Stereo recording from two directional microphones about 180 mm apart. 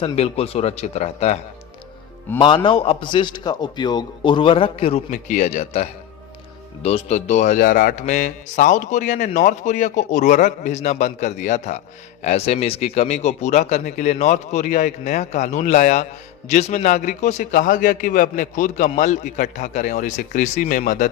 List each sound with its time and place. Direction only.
0.0 s speech: 35° left (ahead or behind)
2.3 s speech: 10° left (ahead or behind)
2.6 s a man's voice: 30° left (ahead or behind)